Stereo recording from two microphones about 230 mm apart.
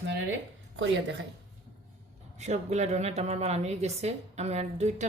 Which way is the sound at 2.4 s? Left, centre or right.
Right.